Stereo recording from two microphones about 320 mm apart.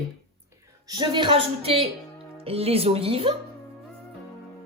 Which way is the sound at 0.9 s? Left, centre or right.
Centre.